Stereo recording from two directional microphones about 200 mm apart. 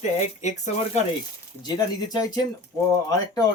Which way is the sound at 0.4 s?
35° left (ahead or behind).